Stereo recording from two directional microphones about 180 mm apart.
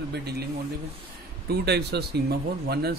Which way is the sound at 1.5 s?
65° right (ahead or behind).